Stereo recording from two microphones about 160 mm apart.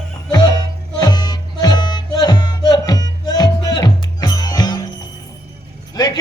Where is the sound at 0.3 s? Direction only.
25° left (ahead or behind).